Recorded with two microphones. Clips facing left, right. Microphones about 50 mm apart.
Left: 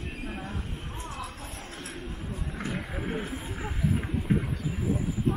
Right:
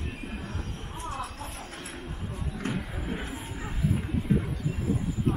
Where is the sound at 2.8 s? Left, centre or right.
Centre.